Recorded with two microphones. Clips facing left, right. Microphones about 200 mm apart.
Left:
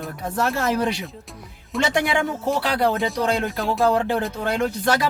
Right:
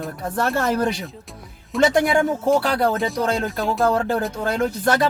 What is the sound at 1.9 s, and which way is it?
Speech, 50° right (ahead or behind).